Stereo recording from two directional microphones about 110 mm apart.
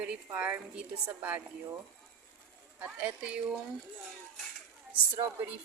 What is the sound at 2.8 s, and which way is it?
Speech, 10° right (ahead or behind).